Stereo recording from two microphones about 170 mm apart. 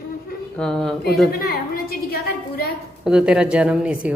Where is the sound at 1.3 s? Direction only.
60° left (ahead or behind).